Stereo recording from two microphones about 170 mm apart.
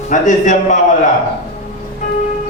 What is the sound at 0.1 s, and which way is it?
Speech, 45° left (ahead or behind).